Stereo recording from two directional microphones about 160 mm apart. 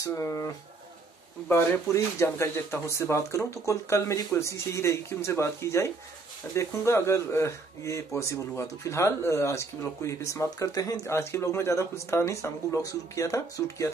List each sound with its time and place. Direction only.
0.0 s speech: 20° left (ahead or behind)
1.5 s speech: 15° left (ahead or behind)